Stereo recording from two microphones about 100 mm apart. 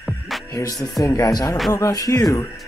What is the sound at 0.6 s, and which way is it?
Speech, 35° left (ahead or behind).